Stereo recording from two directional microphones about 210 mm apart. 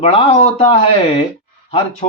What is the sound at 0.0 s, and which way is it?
Speech, 30° left (ahead or behind).